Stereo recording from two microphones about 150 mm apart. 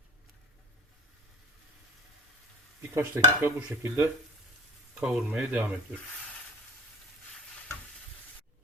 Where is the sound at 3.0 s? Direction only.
15° right (ahead or behind).